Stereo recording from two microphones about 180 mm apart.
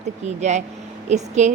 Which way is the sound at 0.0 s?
40° right (ahead or behind).